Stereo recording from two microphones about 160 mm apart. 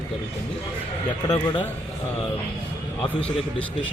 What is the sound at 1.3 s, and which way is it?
Speech, 30° left (ahead or behind).